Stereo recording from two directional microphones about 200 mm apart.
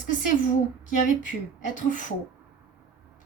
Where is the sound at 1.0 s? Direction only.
40° left (ahead or behind).